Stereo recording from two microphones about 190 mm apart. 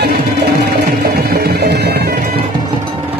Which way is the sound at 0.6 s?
55° right (ahead or behind).